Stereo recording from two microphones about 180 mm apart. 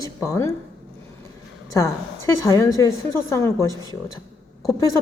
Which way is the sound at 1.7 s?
20° left (ahead or behind).